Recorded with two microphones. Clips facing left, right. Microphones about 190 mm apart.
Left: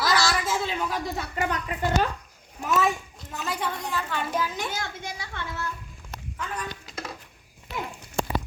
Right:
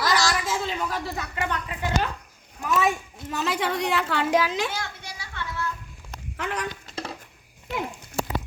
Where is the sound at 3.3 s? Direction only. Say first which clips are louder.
Right 5 dB; 90° right.